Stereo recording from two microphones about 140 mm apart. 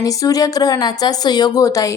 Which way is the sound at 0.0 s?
25° left (ahead or behind).